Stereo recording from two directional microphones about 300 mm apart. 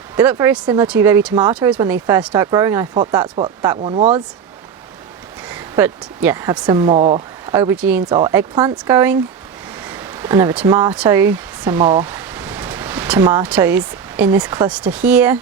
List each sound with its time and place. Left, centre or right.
0.2 s speech: centre
5.5 s speech: centre
7.4 s speech: centre